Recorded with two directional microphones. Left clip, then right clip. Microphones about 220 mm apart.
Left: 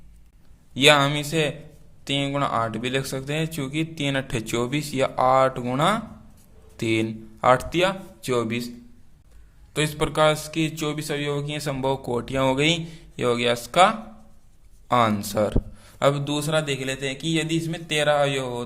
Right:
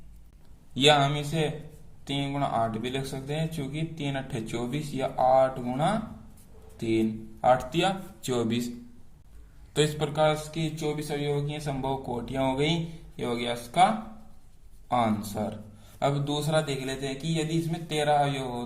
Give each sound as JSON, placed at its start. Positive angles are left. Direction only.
{"t": 0.7, "sound": "a man's voice", "side_deg": 25}
{"t": 7.7, "sound": "a man's voice", "side_deg": 30}
{"t": 9.7, "sound": "a man's voice", "side_deg": 20}
{"t": 10.2, "sound": "a man's voice", "side_deg": 40}